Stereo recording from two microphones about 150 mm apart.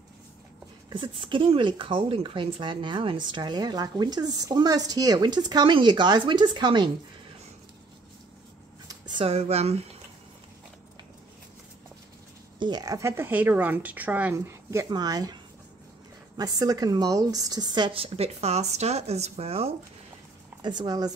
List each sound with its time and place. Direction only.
0.8 s speech: 35° right (ahead or behind)
8.8 s a sound: 30° right (ahead or behind)
12.5 s speech: 30° right (ahead or behind)
16.3 s speech: 25° right (ahead or behind); by 19.7 s 40° right (ahead or behind)
20.6 s speech: 30° right (ahead or behind)